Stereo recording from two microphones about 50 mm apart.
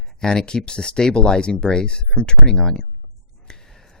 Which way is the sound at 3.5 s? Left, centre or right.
Centre.